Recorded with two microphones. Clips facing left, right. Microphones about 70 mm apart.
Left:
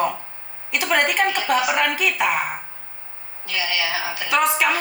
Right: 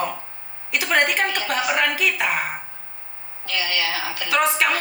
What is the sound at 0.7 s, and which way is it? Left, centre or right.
A woman's voice, centre.